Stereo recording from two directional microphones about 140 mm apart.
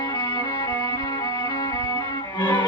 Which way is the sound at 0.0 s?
30° left (ahead or behind).